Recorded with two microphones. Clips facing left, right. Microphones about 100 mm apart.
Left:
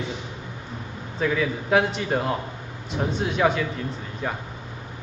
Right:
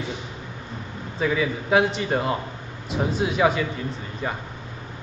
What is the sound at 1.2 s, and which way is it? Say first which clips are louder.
A man's voice: even; centre (ahead or behind).